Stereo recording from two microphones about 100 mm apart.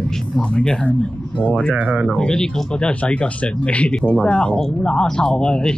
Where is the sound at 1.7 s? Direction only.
15° right (ahead or behind).